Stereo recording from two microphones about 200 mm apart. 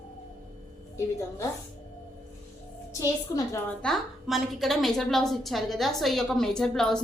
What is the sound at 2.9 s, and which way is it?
Speech, 15° left (ahead or behind).